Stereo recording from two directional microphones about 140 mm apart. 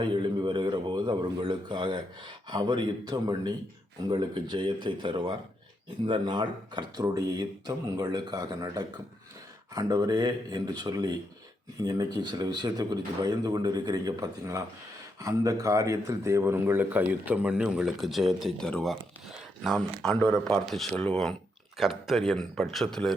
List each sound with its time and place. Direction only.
0.0 s a man's voice: 35° right (ahead or behind); by 23.1 s 5° left (ahead or behind)